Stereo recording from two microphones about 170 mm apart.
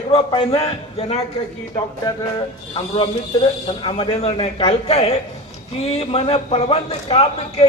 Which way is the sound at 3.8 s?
30° left (ahead or behind).